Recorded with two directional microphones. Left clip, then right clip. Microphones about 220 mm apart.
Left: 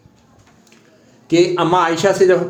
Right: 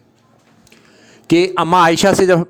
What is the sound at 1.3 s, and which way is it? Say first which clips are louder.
A man's voice: right 1 dB; 45° right (ahead or behind).